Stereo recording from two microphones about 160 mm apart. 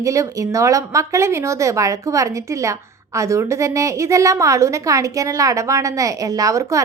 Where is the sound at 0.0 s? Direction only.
20° right (ahead or behind).